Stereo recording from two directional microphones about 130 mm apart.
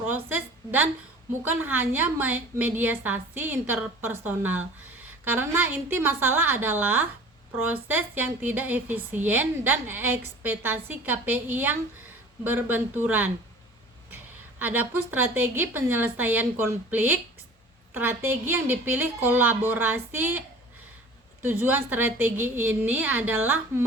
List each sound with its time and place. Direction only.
0.3 s a sound: 15° right (ahead or behind)
1.5 s a woman's voice: 15° right (ahead or behind)
14.6 s a woman's voice: 15° right (ahead or behind)
21.4 s a woman's voice: 15° right (ahead or behind)